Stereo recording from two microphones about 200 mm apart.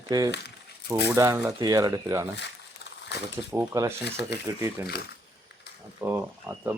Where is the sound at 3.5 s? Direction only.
15° right (ahead or behind).